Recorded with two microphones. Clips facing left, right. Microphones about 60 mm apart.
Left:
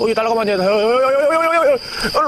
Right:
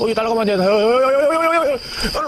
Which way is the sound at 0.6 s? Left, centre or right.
Centre.